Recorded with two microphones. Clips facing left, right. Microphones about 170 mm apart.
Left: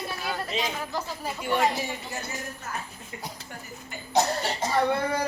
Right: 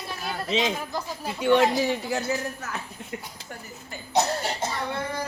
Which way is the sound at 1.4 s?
90° right.